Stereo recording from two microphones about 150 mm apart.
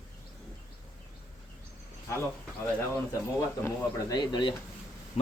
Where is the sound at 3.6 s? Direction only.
25° left (ahead or behind).